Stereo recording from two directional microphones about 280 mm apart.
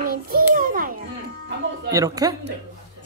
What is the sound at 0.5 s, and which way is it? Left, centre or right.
Children playing, right.